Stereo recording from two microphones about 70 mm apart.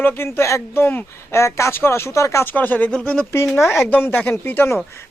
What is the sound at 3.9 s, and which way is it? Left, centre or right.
Speech, left.